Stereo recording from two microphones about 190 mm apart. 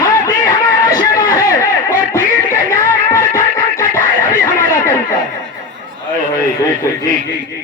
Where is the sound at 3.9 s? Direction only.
15° left (ahead or behind).